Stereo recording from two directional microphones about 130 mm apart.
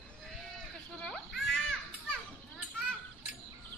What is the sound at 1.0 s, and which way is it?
Children playing, 5° left (ahead or behind).